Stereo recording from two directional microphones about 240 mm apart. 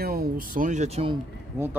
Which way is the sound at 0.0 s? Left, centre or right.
Right.